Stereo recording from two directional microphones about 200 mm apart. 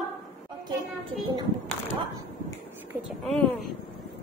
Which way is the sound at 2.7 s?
10° right (ahead or behind).